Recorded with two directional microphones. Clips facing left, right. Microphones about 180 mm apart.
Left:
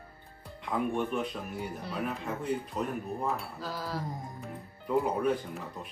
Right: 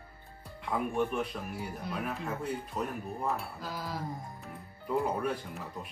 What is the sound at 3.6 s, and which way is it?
Speech, 10° right (ahead or behind).